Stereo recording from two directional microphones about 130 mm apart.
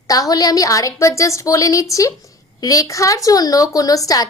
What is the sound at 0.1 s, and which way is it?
A woman's voice, 30° left (ahead or behind).